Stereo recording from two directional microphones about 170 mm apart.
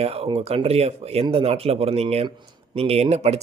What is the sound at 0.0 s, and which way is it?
Speech, 35° right (ahead or behind).